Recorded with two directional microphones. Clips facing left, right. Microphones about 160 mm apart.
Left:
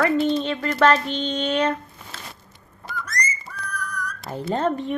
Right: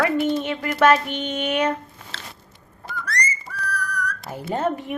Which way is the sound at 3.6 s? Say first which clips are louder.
Right 4 dB; 70° right (ahead or behind).